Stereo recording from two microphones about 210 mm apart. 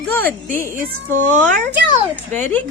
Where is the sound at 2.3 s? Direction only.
10° left (ahead or behind).